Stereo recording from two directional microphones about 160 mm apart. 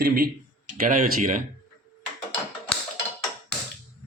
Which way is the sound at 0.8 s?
60° right (ahead or behind).